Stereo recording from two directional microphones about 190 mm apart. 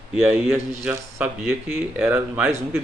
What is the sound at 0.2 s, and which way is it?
Speech, 10° right (ahead or behind).